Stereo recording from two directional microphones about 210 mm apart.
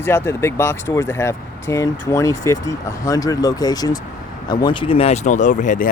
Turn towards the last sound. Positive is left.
turn(degrees=40)  # may be behind; listen again after turning